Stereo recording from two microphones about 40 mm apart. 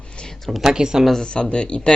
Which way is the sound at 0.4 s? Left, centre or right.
Centre.